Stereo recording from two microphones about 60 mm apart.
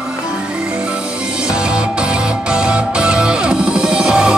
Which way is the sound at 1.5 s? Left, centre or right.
Centre.